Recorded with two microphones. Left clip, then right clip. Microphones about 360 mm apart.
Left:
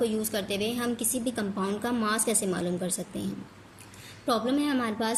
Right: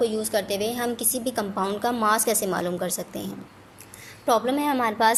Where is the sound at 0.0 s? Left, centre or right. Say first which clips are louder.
Right 5 dB; centre.